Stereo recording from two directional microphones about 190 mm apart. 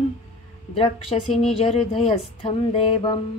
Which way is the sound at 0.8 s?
30° left (ahead or behind).